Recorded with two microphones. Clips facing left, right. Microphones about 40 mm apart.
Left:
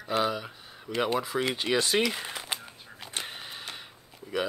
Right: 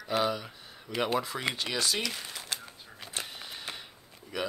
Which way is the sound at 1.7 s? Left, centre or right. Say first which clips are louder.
Left 8 dB; left.